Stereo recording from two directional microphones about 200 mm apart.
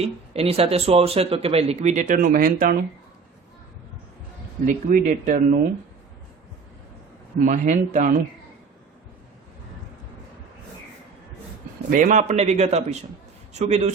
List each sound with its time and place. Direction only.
0.0 s speech: 30° right (ahead or behind)
4.6 s speech: 40° right (ahead or behind)
7.4 s speech: 40° right (ahead or behind)
11.9 s a man's voice: 40° right (ahead or behind)